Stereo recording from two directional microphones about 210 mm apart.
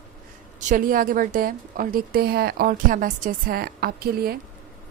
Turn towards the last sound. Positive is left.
turn(degrees=-45)  # may be behind; listen again after turning